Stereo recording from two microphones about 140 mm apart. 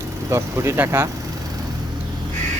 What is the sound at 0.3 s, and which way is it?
Speech, 20° right (ahead or behind).